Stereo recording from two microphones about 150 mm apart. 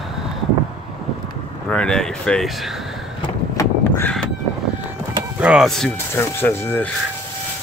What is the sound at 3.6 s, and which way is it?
Crow, 15° left (ahead or behind).